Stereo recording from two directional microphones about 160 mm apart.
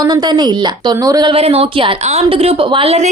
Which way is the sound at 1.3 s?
40° right (ahead or behind).